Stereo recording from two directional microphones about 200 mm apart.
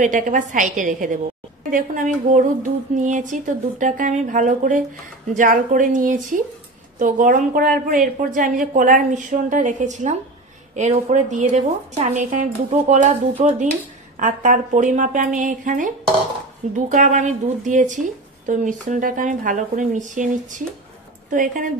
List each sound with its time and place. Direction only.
0.0 s speech: 40° right (ahead or behind)